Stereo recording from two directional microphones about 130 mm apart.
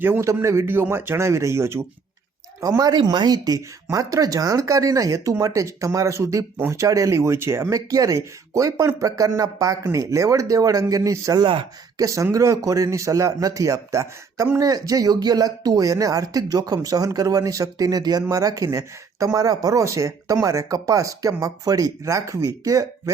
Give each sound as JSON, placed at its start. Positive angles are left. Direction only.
{"t": 0.0, "sound": "speech", "side_deg": -20}